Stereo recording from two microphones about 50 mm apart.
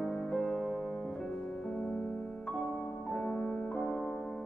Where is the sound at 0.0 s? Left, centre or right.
Centre.